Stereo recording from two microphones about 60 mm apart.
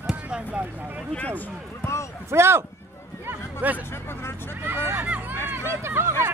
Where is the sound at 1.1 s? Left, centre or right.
Left.